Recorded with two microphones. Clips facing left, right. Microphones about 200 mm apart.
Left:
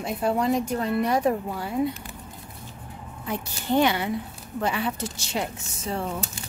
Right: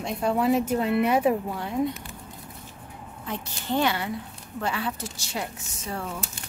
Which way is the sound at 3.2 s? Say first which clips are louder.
Left 3 dB; 15° left (ahead or behind).